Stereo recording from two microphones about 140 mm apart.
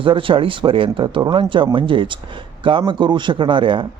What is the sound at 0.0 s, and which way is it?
Speech, 40° right (ahead or behind).